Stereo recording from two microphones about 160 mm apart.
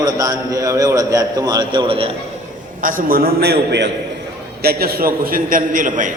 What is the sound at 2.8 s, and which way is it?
A man's voice, 60° right (ahead or behind).